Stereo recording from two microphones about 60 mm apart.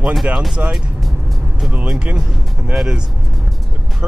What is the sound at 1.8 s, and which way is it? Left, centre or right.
Speech, centre.